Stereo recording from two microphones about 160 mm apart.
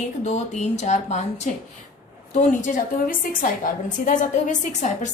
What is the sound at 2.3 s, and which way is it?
A woman's voice, 55° left (ahead or behind).